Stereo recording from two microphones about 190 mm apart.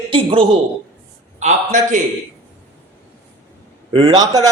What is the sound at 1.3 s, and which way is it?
Speech, 40° right (ahead or behind).